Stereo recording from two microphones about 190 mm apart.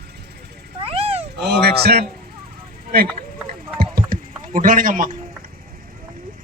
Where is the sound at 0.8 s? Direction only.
30° right (ahead or behind).